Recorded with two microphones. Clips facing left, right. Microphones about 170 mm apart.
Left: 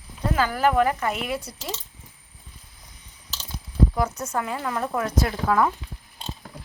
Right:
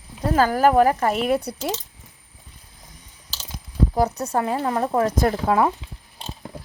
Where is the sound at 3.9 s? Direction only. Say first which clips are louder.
Right 4 dB; 35° right (ahead or behind).